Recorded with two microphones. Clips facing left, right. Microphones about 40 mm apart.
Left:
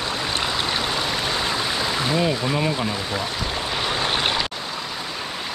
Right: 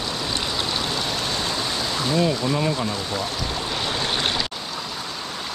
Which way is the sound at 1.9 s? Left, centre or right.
Centre.